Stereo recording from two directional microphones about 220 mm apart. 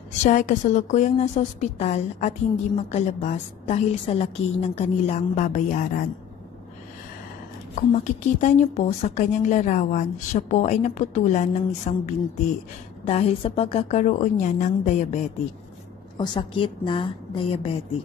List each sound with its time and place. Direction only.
0.2 s a woman's voice: 35° left (ahead or behind)
7.7 s a woman's voice: 35° left (ahead or behind)
16.2 s a woman's voice: 25° left (ahead or behind)